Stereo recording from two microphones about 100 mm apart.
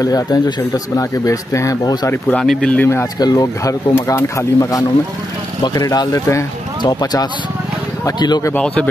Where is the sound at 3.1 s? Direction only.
40° left (ahead or behind).